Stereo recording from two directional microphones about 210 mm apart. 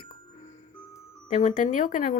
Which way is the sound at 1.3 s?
35° left (ahead or behind).